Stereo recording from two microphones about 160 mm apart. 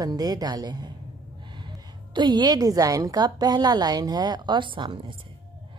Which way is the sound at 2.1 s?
25° right (ahead or behind).